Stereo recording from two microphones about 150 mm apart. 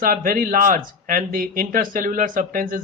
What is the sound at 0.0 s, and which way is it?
A man's voice, 70° right (ahead or behind).